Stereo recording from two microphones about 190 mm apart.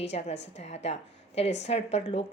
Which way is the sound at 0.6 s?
35° left (ahead or behind).